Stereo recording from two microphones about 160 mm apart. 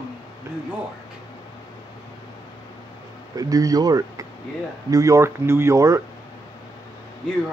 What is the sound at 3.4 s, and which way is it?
Speech, 20° right (ahead or behind).